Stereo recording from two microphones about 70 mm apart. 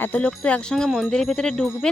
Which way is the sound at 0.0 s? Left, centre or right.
Left.